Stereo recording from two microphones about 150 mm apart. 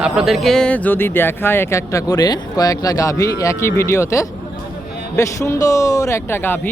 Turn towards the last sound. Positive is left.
turn(degrees=15)  # may be behind; listen again after turning